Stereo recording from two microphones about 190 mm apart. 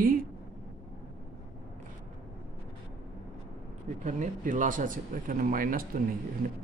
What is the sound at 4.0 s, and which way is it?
Speech, 40° right (ahead or behind).